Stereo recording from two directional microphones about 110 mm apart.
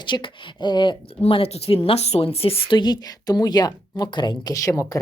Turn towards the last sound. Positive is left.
turn(degrees=30)  # may be behind; listen again after turning